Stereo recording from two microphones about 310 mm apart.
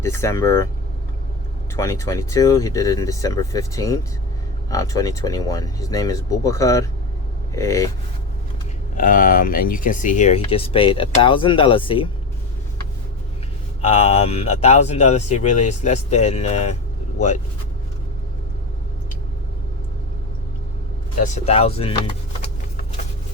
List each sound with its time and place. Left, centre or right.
0.0 s speech: centre
1.7 s speech: centre
9.0 s speech: left
13.8 s speech: centre
21.2 s speech: left